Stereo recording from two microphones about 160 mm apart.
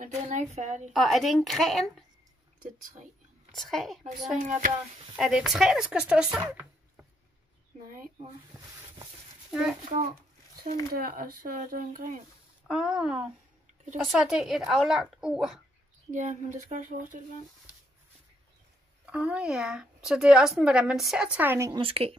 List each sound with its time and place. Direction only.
0.0 s speech: 45° right (ahead or behind)
0.9 s speech: centre (ahead or behind)
3.5 s speech: centre (ahead or behind)
4.4 s speech: 55° right (ahead or behind)
5.1 s speech: 5° right (ahead or behind)
8.8 s a sound: 25° right (ahead or behind)
9.5 s a child's voice: 5° right (ahead or behind)
11.0 s speech: 65° right (ahead or behind)
12.6 s speech: 5° right (ahead or behind)
16.1 s speech: 50° right (ahead or behind)
19.0 s speech: 5° right (ahead or behind)
21.7 s speech: 35° right (ahead or behind)